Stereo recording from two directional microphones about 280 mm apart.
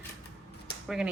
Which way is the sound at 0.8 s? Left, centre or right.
Centre.